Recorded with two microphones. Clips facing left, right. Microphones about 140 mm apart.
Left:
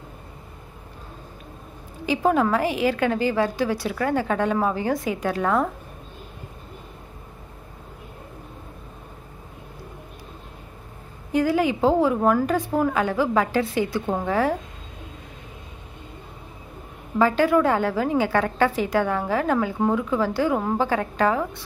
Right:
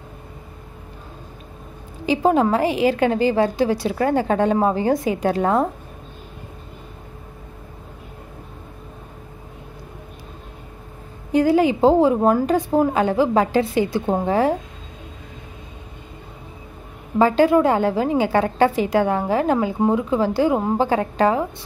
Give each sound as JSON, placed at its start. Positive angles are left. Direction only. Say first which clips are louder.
{"t": 2.0, "sound": "a woman's voice", "louder": "right 3 dB", "side_deg": -25}
{"t": 11.3, "sound": "a woman's voice", "louder": "right 5 dB", "side_deg": -25}
{"t": 17.2, "sound": "a woman's voice", "louder": "right 4 dB", "side_deg": -25}